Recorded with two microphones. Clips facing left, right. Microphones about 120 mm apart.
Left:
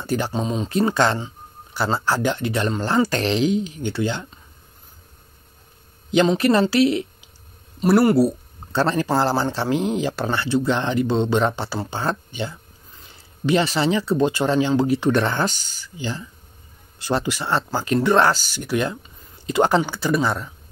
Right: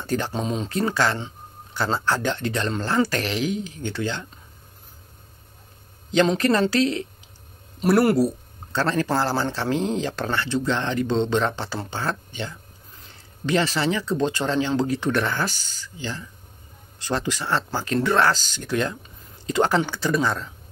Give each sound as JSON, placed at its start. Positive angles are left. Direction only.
{"t": 0.0, "sound": "speech", "side_deg": 10}
{"t": 0.7, "sound": "speech", "side_deg": 20}
{"t": 1.2, "sound": "speech", "side_deg": 10}
{"t": 6.3, "sound": "speech", "side_deg": 15}
{"t": 7.8, "sound": "speech", "side_deg": 0}
{"t": 8.7, "sound": "speech", "side_deg": 15}